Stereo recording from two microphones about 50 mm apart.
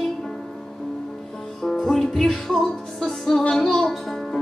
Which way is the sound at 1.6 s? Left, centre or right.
Centre.